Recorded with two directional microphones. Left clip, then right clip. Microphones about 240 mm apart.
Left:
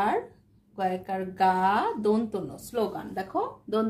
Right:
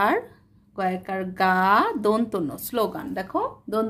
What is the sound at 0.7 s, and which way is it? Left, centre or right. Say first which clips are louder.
A woman's voice: right 3 dB; right.